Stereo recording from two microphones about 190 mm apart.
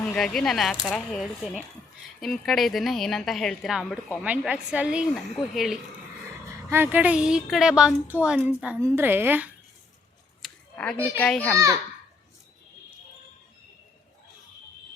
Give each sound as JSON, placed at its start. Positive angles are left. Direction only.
{"t": 0.0, "sound": "a woman's voice", "side_deg": 5}
{"t": 10.4, "sound": "a sound", "side_deg": 5}
{"t": 11.2, "sound": "a child's voice", "side_deg": 5}
{"t": 11.5, "sound": "a woman's voice", "side_deg": -15}